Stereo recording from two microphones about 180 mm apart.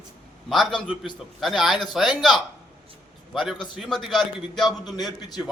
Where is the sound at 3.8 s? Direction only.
Centre (ahead or behind).